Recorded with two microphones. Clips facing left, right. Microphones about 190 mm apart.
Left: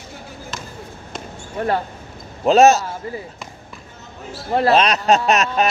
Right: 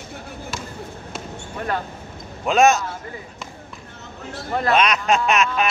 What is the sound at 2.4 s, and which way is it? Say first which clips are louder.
Speech: left 4 dB; 35° left (ahead or behind).